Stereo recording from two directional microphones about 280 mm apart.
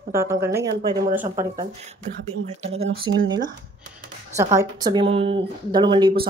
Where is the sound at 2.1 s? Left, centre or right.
Right.